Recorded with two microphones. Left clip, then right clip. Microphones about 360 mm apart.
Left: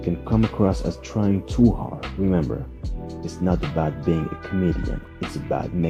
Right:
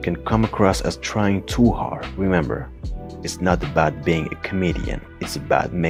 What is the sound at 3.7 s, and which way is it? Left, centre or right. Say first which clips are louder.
Speech: right 5 dB; right.